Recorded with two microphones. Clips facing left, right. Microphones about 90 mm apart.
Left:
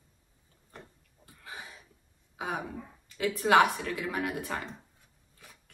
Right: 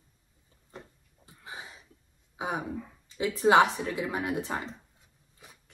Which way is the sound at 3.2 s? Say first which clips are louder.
Right 2 dB; 25° right (ahead or behind).